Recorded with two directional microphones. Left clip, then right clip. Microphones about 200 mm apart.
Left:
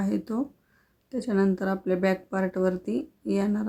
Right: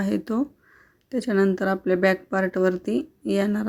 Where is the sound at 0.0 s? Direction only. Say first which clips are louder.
Right 4 dB; 15° right (ahead or behind).